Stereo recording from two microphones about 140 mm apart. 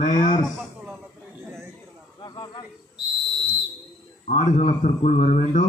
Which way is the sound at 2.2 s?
30° left (ahead or behind).